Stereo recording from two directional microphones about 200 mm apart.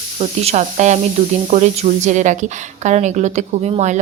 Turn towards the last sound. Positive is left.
turn(degrees=-35)  # may be behind; listen again after turning